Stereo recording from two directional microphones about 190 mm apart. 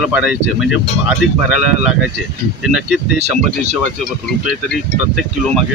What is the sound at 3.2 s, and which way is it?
Speech, 35° right (ahead or behind).